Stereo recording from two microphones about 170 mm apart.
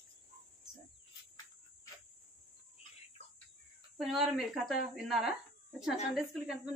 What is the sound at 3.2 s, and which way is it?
Bird, 35° left (ahead or behind).